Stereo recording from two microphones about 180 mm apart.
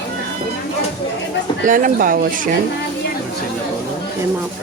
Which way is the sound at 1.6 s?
45° right (ahead or behind).